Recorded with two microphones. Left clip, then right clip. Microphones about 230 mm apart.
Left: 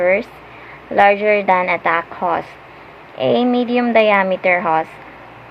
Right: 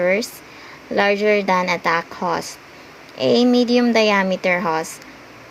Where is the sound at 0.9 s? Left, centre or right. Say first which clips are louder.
Left 4 dB; right.